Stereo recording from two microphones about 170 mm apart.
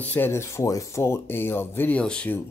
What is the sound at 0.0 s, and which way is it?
Speech, 10° left (ahead or behind).